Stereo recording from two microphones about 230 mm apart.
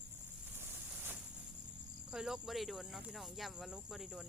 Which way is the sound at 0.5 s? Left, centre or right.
Centre.